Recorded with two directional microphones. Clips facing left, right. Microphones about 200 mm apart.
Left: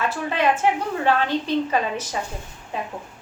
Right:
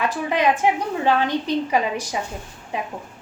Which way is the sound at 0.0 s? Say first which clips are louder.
Right 2 dB; 15° right (ahead or behind).